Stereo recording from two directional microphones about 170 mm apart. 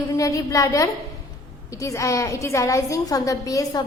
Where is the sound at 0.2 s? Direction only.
20° left (ahead or behind).